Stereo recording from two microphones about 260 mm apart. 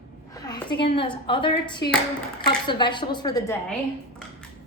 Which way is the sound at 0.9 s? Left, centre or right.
Centre.